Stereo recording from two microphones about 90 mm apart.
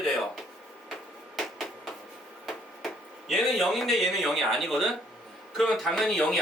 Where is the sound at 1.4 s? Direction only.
Centre (ahead or behind).